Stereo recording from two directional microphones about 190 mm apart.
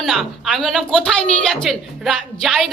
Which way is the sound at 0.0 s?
Centre (ahead or behind).